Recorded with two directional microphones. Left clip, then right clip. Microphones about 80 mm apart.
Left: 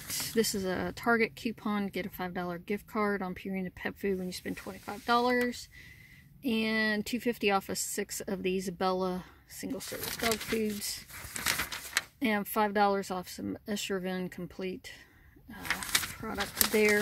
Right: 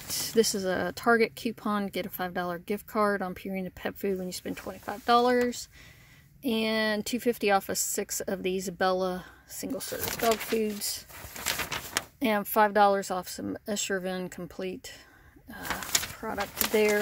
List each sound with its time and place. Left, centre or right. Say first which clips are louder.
0.1 s speech: right 5 dB; right
10.5 s speech: right 4 dB; right
11.5 s a sound: right 4 dB; right
12.2 s speech: right 7 dB; right
16.2 s speech: right 1 dB; right